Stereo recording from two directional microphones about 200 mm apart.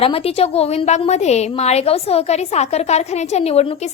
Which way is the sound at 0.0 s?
30° left (ahead or behind).